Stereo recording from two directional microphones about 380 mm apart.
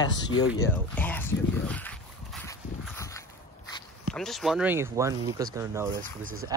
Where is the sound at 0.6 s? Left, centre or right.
Centre.